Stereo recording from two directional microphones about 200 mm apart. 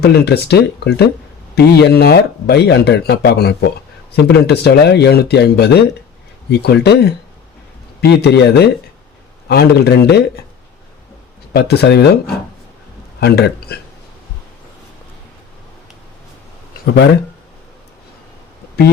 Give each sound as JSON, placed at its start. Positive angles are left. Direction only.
{"t": 0.0, "sound": "speech", "side_deg": 55}
{"t": 8.2, "sound": "speech", "side_deg": 55}
{"t": 11.5, "sound": "speech", "side_deg": 55}
{"t": 13.1, "sound": "a man's voice", "side_deg": 55}
{"t": 16.8, "sound": "speech", "side_deg": 60}